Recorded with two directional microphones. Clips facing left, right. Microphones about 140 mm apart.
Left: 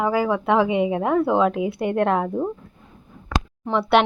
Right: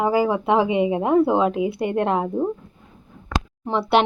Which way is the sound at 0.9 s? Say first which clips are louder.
Right 3 dB; 20° right (ahead or behind).